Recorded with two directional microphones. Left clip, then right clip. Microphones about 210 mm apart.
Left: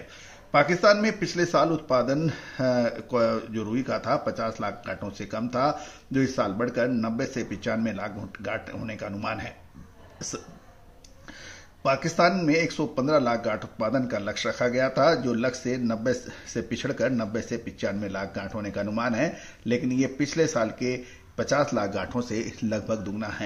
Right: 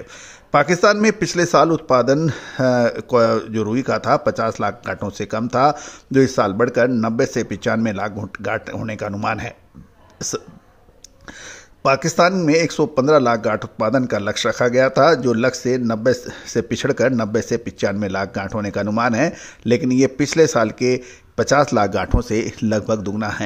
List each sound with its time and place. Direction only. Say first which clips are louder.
0.5 s a man's voice: right 5 dB; 50° right (ahead or behind)
11.4 s a man's voice: right 8 dB; 50° right (ahead or behind)